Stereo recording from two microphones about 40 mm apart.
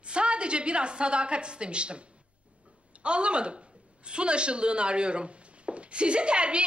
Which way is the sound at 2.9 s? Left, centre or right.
Right.